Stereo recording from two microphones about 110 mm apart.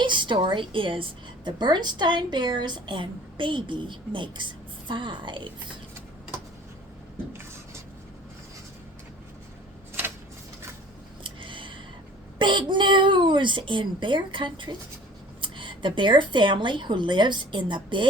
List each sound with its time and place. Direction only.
0.0 s a woman's voice: 45° right (ahead or behind)
11.2 s scissors: 50° right (ahead or behind)
12.4 s a woman's voice: 45° right (ahead or behind)